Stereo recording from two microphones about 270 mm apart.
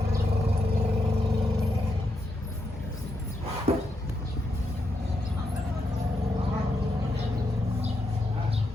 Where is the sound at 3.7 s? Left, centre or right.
Right.